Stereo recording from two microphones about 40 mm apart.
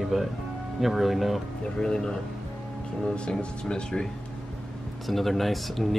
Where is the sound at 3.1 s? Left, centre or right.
Left.